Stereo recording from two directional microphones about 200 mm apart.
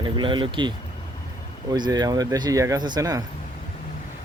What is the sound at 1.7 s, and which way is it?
Speech, 20° right (ahead or behind).